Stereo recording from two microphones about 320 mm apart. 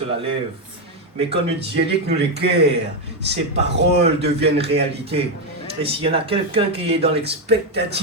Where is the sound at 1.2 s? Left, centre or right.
Centre.